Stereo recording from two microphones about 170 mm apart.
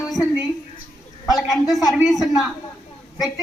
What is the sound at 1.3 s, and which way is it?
A woman's voice, centre (ahead or behind).